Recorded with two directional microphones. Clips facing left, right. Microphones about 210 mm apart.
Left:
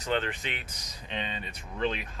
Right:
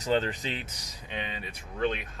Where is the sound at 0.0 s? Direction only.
35° right (ahead or behind).